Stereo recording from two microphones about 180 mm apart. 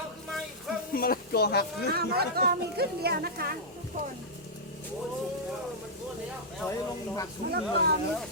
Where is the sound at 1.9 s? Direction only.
60° right (ahead or behind).